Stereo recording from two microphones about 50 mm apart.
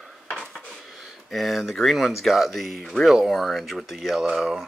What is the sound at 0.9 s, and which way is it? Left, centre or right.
Speech, centre.